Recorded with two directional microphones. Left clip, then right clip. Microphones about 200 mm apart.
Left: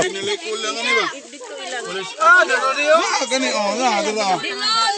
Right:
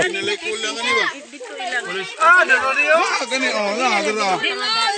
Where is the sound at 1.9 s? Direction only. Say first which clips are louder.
Left 1 dB; 40° left (ahead or behind).